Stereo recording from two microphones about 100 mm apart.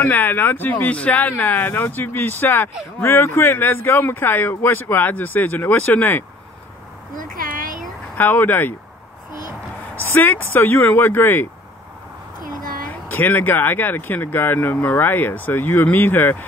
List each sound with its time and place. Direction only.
0.0 s speech: 20° left (ahead or behind)
8.2 s speech: 20° left (ahead or behind)
10.0 s speech: 20° left (ahead or behind)
13.1 s speech: 15° left (ahead or behind)